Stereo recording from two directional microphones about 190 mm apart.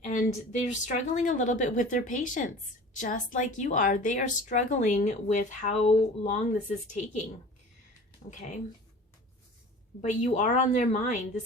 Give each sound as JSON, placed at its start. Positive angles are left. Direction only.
{"t": 0.0, "sound": "a woman's voice", "side_deg": 45}
{"t": 8.3, "sound": "a woman's voice", "side_deg": 40}
{"t": 10.0, "sound": "a woman's voice", "side_deg": 40}